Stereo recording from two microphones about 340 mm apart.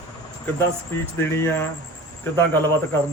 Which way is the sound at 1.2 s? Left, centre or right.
Centre.